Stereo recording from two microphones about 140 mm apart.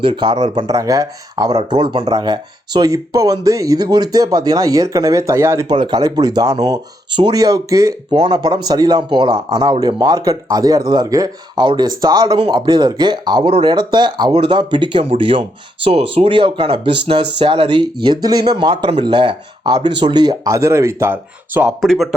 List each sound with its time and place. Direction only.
0.0 s speech: 35° right (ahead or behind); by 21.7 s 15° right (ahead or behind)
21.8 s speech: centre (ahead or behind)